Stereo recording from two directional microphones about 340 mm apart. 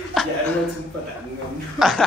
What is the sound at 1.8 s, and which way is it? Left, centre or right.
Speech, centre.